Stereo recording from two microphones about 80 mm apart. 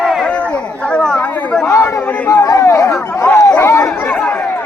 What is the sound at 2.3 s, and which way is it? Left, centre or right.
Speech, left.